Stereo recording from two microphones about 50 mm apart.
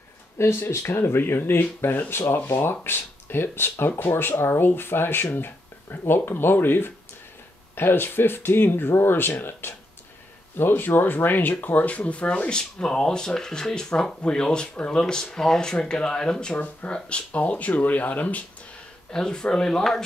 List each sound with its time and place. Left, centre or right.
0.4 s speech: left; by 16.5 s centre
16.5 s speech: left
19.1 s speech: centre